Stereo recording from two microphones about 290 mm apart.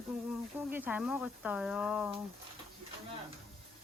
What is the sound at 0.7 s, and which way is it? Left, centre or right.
Speech, centre.